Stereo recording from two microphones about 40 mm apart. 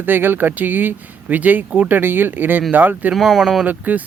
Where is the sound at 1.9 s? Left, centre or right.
Right.